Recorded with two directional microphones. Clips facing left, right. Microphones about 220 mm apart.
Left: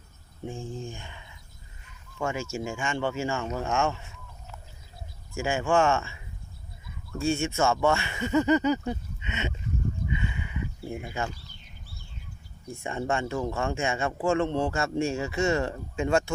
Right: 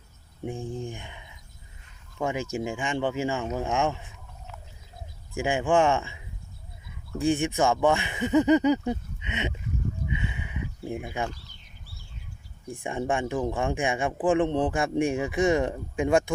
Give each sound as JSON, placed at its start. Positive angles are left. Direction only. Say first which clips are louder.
{"t": 0.4, "sound": "speech", "louder": "right 3 dB", "side_deg": -20}
{"t": 5.3, "sound": "speech", "louder": "right 2 dB", "side_deg": -15}
{"t": 11.0, "sound": "speech", "louder": "even", "side_deg": -15}
{"t": 12.6, "sound": "speech", "louder": "right 2 dB", "side_deg": -15}